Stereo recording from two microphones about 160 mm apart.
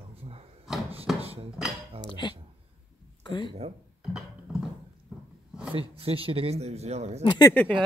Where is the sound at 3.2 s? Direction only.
30° left (ahead or behind).